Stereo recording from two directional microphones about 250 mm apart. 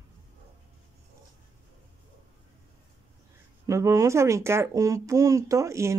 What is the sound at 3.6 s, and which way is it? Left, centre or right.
Speech, centre.